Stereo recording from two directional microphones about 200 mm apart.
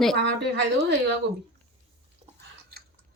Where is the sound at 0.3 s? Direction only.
60° right (ahead or behind).